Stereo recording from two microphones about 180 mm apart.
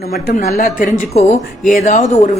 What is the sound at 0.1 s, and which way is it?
A woman's voice, 55° left (ahead or behind).